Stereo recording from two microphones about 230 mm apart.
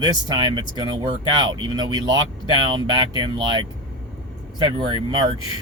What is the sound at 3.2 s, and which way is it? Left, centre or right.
Speech, centre.